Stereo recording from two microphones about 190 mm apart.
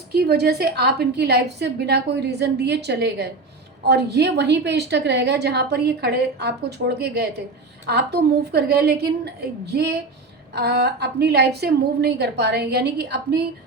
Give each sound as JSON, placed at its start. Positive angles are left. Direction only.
{"t": 0.1, "sound": "a woman's voice", "side_deg": -60}
{"t": 10.5, "sound": "a woman's voice", "side_deg": -60}